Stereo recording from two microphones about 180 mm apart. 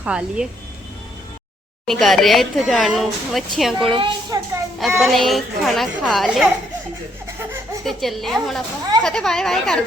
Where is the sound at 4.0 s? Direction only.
25° right (ahead or behind).